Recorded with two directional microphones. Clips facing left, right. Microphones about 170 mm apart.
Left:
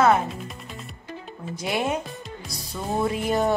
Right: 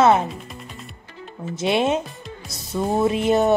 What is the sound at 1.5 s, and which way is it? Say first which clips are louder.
Speech: right 6 dB; 25° right (ahead or behind).